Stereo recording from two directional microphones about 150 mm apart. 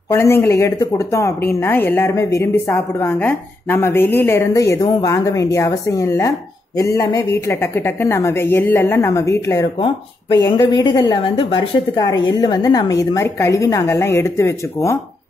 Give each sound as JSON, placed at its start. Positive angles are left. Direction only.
{"t": 0.1, "sound": "speech", "side_deg": 15}